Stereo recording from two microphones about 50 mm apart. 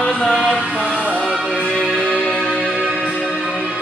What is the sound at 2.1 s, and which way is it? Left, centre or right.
Music, left.